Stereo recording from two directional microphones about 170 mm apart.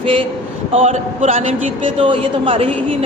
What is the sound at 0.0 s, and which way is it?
A woman's voice, 30° right (ahead or behind).